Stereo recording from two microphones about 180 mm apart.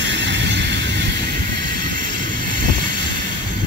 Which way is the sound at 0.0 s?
85° right.